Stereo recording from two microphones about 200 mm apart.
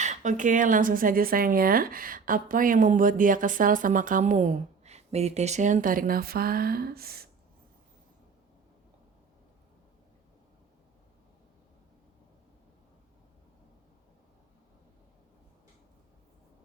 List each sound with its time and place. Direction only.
0.0 s speech: 35° right (ahead or behind)